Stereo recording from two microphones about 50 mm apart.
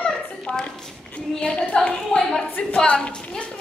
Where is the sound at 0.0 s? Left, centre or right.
Centre.